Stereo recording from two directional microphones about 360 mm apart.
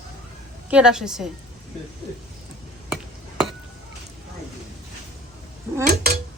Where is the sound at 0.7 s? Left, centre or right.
Centre.